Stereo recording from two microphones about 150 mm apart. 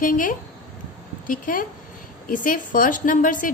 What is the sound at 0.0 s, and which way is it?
A woman's voice, 65° left (ahead or behind).